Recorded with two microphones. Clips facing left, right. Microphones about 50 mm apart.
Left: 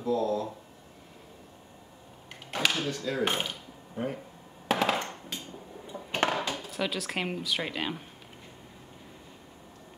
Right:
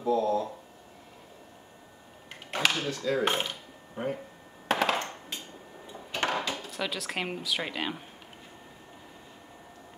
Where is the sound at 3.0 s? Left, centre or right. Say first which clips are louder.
Right 4 dB; centre.